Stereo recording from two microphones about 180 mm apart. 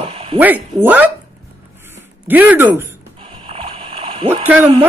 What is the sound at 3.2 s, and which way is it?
Splash, 30° right (ahead or behind).